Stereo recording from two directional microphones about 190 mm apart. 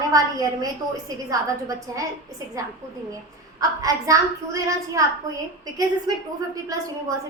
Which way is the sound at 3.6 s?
20° right (ahead or behind).